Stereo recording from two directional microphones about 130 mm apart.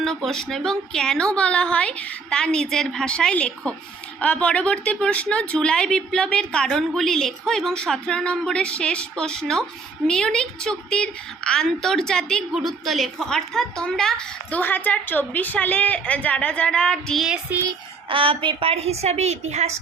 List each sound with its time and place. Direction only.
0.0 s a woman's voice: 5° left (ahead or behind)
17.2 s child singing: 5° right (ahead or behind)
17.7 s a woman's voice: 40° right (ahead or behind); by 19.7 s 60° right (ahead or behind)